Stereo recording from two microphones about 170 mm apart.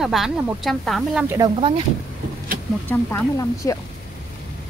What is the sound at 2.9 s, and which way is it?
Speech, 15° left (ahead or behind).